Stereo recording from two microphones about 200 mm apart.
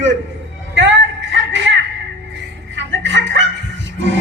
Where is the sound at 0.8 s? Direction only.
65° right (ahead or behind).